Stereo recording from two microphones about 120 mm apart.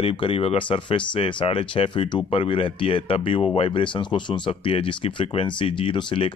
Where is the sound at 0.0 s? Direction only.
50° left (ahead or behind).